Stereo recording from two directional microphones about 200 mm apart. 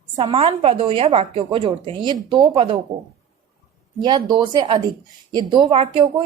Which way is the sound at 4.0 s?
20° right (ahead or behind).